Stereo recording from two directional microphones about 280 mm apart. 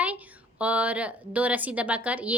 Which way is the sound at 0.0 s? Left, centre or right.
Centre.